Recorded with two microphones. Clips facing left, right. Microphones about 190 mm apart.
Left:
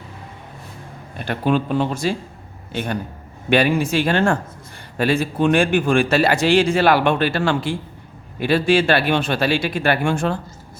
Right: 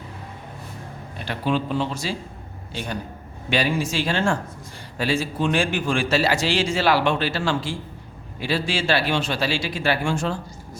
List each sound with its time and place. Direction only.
1.2 s a man's voice: 50° left (ahead or behind)